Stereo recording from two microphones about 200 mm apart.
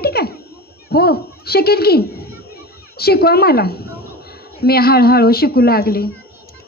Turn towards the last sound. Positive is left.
turn(degrees=50)  # may be behind; listen again after turning